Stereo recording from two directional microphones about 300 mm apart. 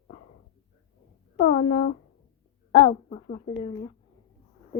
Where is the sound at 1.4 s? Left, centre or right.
Left.